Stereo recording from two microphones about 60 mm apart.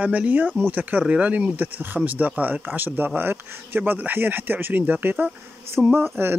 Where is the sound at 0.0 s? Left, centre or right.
Right.